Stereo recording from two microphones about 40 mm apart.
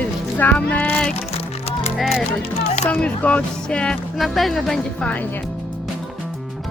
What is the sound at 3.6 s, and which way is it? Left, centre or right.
Music, left.